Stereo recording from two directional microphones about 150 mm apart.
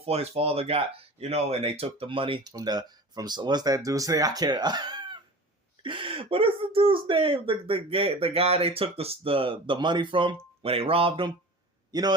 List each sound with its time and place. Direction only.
0.0 s speech: 45° right (ahead or behind)
11.9 s a man's voice: 25° right (ahead or behind)